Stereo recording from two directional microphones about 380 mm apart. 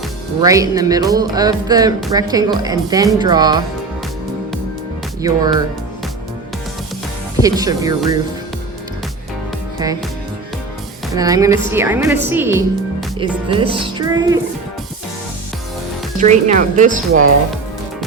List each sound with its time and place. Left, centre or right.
0.4 s speech: centre
5.2 s speech: centre
7.3 s speech: centre
9.7 s music: centre
11.1 s speech: centre
16.1 s speech: centre